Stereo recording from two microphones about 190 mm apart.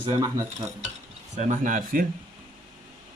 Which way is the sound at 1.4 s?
40° right (ahead or behind).